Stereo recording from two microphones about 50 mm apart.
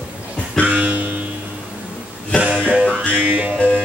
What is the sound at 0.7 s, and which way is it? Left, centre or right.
Music, right.